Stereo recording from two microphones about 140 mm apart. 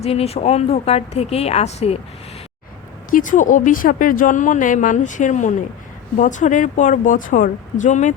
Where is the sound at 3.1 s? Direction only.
70° left (ahead or behind).